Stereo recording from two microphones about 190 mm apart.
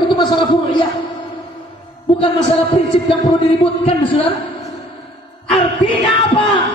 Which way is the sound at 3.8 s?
30° left (ahead or behind).